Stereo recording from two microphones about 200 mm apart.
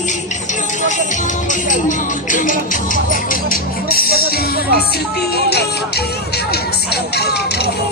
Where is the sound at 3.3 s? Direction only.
45° left (ahead or behind).